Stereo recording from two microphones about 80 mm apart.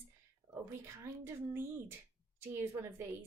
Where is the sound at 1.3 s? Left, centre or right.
Right.